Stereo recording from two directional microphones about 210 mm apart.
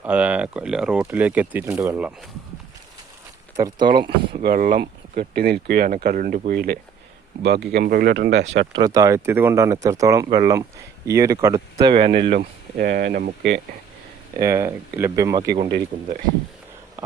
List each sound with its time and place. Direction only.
0.0 s speech: 5° right (ahead or behind)
3.5 s speech: 20° right (ahead or behind)
4.4 s speech: 40° right (ahead or behind)
8.7 s speech: 20° right (ahead or behind); by 13.6 s 50° right (ahead or behind)
14.3 s speech: 15° right (ahead or behind)
15.9 s speech: 40° right (ahead or behind)